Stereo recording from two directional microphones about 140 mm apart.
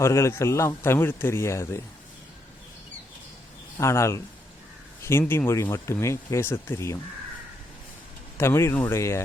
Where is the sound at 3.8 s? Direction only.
20° left (ahead or behind).